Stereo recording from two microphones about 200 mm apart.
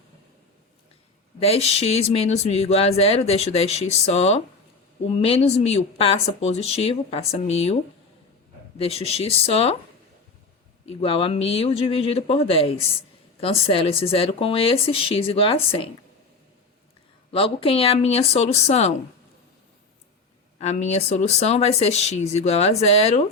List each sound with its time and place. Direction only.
1.4 s speech: 30° left (ahead or behind)
8.8 s speech: 30° left (ahead or behind)
10.8 s speech: 30° left (ahead or behind)
17.3 s speech: 30° left (ahead or behind)
20.6 s speech: 35° left (ahead or behind)